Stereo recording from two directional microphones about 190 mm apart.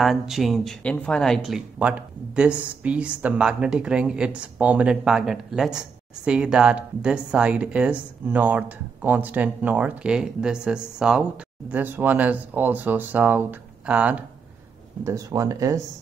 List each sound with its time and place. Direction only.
0.0 s speech: centre (ahead or behind)
15.0 s speech: 15° right (ahead or behind)